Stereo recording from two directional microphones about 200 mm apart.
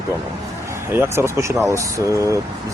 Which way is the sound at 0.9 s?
10° right (ahead or behind).